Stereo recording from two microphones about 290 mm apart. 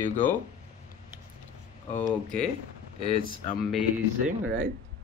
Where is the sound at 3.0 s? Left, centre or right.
Centre.